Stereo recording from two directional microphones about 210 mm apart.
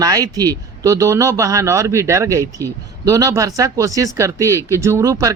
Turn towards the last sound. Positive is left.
turn(degrees=-15)  # may be behind; listen again after turning